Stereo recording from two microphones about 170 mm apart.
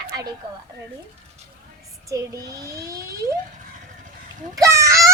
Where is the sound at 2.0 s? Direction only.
20° right (ahead or behind).